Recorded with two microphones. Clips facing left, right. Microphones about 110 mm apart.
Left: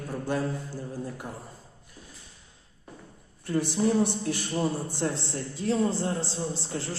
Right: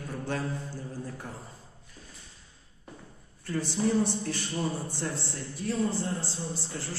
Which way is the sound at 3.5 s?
15° left (ahead or behind).